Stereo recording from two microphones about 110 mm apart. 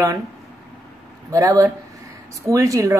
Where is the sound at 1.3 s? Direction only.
30° right (ahead or behind).